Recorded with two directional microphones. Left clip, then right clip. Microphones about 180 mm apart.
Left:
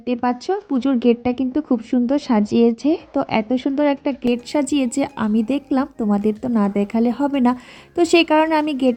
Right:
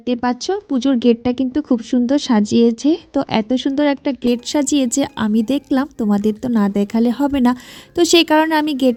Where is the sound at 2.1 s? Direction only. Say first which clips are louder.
Right 3 dB; 40° right (ahead or behind).